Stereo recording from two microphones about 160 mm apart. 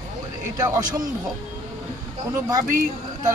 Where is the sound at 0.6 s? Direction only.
25° right (ahead or behind).